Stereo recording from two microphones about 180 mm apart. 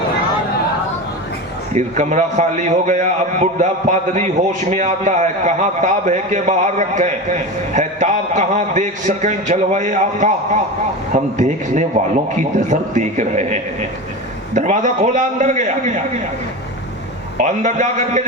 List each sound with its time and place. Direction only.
1.7 s a man's voice: 40° right (ahead or behind)
17.3 s a man's voice: 45° right (ahead or behind)